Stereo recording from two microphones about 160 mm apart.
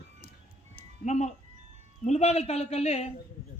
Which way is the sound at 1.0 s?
45° left (ahead or behind).